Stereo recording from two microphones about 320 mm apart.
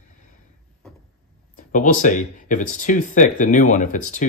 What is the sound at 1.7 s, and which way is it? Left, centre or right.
Speech, left.